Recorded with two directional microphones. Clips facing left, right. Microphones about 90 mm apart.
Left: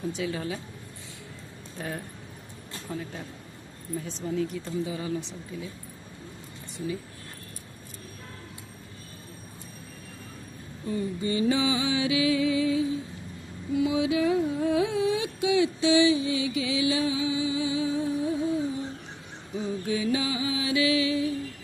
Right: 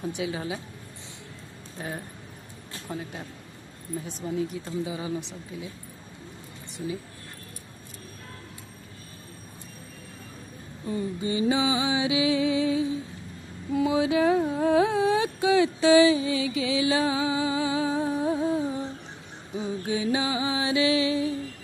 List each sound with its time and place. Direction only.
0.1 s music: 20° right (ahead or behind)
1.8 s speech: 5° right (ahead or behind)
4.2 s speech: 15° right (ahead or behind)
10.8 s music: 25° right (ahead or behind)
13.7 s a sound: 35° right (ahead or behind)
19.5 s music: 25° right (ahead or behind)